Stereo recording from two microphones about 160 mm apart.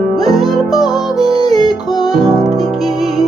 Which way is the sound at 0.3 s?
Centre (ahead or behind).